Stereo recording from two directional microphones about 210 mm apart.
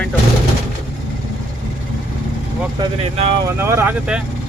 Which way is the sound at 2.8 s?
30° right (ahead or behind).